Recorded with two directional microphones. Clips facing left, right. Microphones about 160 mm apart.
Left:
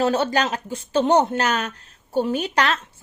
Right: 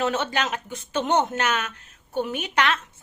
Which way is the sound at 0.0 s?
35° left (ahead or behind).